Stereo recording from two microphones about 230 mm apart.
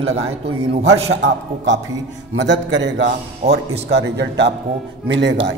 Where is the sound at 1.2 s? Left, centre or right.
Right.